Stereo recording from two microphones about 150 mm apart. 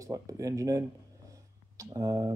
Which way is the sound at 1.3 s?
20° right (ahead or behind).